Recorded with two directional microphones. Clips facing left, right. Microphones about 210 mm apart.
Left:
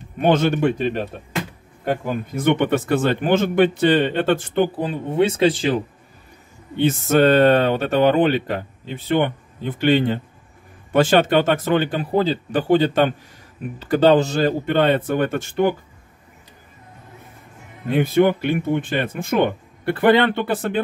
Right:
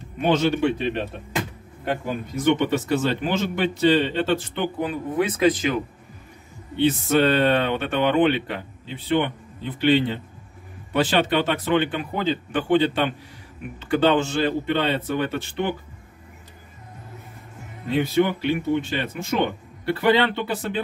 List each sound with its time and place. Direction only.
0.2 s speech: 50° left (ahead or behind)
4.7 s speech: 30° left (ahead or behind)
6.8 s speech: 45° left (ahead or behind)
17.8 s speech: 50° left (ahead or behind)